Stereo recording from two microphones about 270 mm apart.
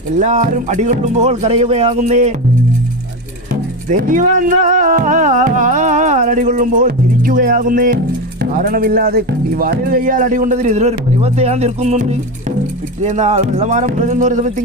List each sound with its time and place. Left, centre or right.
0.2 s speech: right
3.5 s speech: right